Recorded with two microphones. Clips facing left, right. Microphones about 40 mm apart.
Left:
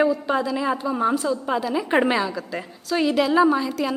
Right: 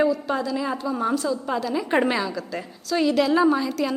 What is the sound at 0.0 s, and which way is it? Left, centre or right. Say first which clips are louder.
A woman's voice: left 2 dB; centre.